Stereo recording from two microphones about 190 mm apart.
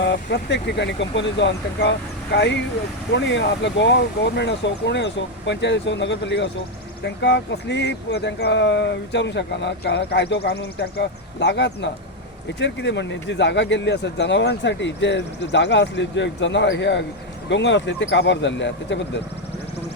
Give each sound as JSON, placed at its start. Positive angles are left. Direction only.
{"t": 0.0, "sound": "speech", "side_deg": 65}